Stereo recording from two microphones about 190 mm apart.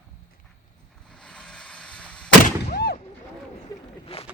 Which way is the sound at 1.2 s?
5° left (ahead or behind).